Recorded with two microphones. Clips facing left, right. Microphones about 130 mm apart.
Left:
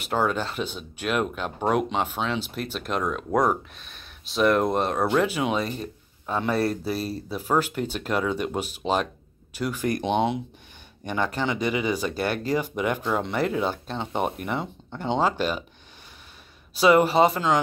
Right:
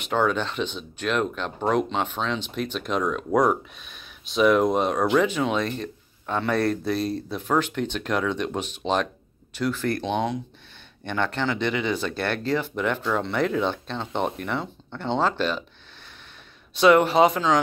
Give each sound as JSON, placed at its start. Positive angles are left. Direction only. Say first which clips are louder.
{"t": 0.0, "sound": "speech", "louder": "right 1 dB", "side_deg": 5}
{"t": 11.1, "sound": "speech", "louder": "even", "side_deg": 10}
{"t": 16.7, "sound": "speech", "louder": "right 1 dB", "side_deg": 5}